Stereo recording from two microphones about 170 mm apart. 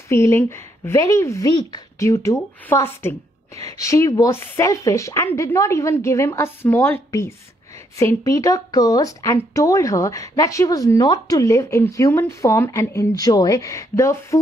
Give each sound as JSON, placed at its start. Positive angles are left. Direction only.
{"t": 0.1, "sound": "speech", "side_deg": 15}